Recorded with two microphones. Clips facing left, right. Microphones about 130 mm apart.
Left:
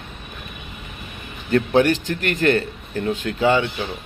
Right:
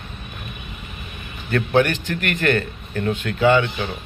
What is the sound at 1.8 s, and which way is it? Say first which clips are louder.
Speech: right 1 dB; 30° left (ahead or behind).